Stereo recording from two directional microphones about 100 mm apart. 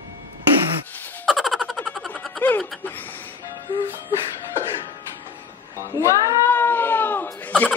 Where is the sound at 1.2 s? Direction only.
Centre (ahead or behind).